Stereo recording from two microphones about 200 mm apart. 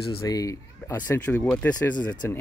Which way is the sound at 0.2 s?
15° left (ahead or behind).